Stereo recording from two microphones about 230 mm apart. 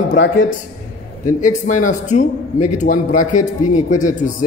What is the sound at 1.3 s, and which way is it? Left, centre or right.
A man's voice, left.